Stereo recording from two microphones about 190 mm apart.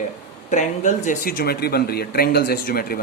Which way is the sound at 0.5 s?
40° left (ahead or behind).